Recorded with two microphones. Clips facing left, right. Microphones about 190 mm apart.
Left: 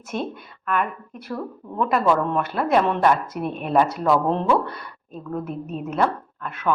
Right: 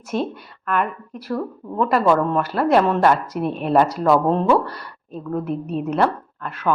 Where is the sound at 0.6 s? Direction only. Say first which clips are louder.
Right 2 dB; centre (ahead or behind).